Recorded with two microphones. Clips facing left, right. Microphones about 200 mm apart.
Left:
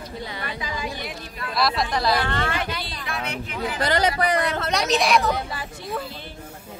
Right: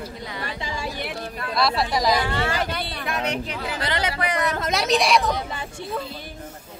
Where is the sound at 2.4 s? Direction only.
35° right (ahead or behind).